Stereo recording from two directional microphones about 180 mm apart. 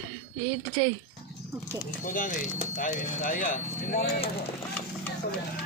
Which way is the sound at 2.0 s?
45° left (ahead or behind).